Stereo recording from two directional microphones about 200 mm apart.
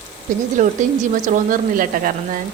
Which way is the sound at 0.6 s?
35° right (ahead or behind).